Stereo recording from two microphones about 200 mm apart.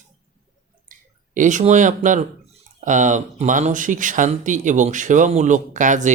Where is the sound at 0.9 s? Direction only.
40° right (ahead or behind).